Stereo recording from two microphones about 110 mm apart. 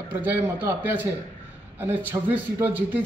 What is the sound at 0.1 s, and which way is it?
A man's voice, 20° right (ahead or behind).